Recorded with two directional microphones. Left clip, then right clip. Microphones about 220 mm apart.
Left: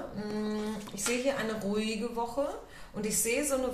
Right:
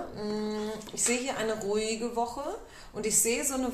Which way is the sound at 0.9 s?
40° right (ahead or behind).